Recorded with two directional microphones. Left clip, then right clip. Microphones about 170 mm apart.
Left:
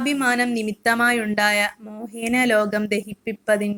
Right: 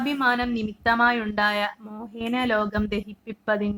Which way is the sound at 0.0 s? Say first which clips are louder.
Left 2 dB; 10° left (ahead or behind).